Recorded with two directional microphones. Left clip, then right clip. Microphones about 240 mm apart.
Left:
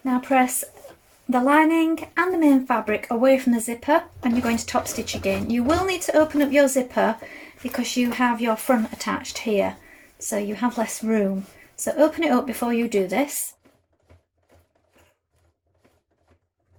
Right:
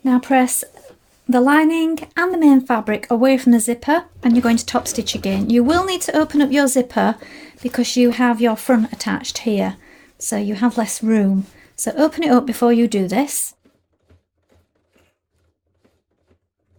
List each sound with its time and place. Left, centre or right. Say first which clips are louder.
0.0 s speech: right 4 dB; right